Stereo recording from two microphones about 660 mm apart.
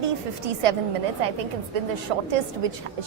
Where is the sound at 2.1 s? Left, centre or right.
Right.